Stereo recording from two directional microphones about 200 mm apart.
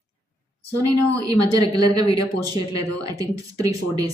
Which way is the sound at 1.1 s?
20° right (ahead or behind).